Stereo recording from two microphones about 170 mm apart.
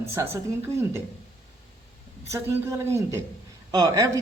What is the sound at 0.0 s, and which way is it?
Speech, 15° right (ahead or behind).